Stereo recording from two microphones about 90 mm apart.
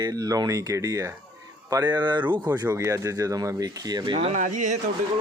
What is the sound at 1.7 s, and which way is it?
Speech, 50° right (ahead or behind).